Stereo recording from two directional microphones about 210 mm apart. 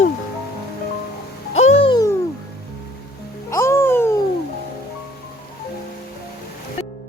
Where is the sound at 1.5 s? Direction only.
30° left (ahead or behind).